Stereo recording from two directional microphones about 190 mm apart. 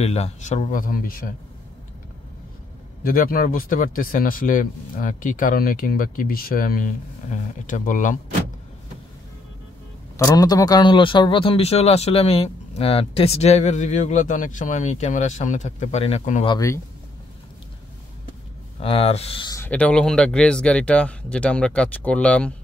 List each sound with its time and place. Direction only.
0.0 s a man's voice: 35° left (ahead or behind)
3.0 s speech: 45° left (ahead or behind)
10.1 s a man's voice: 20° left (ahead or behind); by 16.4 s 35° left (ahead or behind)
16.4 s speech: 15° left (ahead or behind)
18.8 s speech: 30° left (ahead or behind)
19.5 s speech: 10° left (ahead or behind)